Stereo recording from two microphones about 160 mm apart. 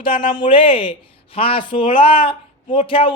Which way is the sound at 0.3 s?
30° left (ahead or behind).